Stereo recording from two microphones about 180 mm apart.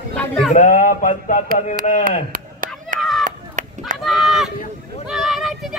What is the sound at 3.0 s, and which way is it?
Chop, centre (ahead or behind).